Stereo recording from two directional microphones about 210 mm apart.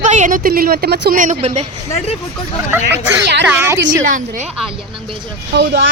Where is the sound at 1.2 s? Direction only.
35° right (ahead or behind).